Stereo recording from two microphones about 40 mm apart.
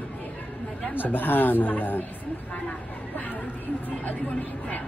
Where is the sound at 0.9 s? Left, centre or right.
Left.